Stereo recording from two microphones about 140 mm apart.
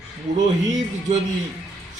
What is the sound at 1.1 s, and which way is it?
Speech, 55° right (ahead or behind).